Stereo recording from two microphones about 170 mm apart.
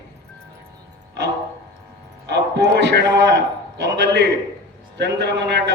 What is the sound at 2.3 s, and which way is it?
A man's voice, 85° right.